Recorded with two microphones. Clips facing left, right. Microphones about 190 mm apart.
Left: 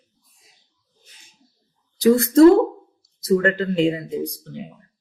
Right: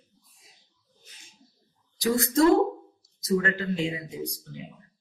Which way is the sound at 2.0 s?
60° left (ahead or behind).